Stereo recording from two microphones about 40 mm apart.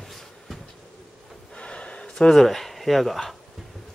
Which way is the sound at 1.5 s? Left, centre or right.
Left.